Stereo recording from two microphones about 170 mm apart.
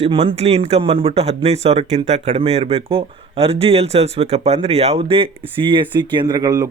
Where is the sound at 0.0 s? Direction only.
35° right (ahead or behind).